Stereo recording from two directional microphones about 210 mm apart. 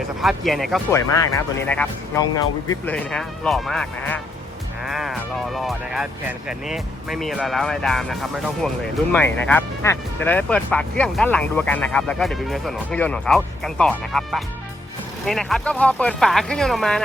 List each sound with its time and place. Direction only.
0.2 s speech: centre (ahead or behind)
0.9 s speech: 15° left (ahead or behind)
2.3 s speech: 20° left (ahead or behind)
2.9 s speech: 5° left (ahead or behind)